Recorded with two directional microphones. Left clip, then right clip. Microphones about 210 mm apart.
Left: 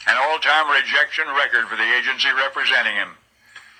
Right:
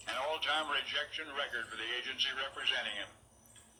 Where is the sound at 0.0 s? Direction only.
45° left (ahead or behind).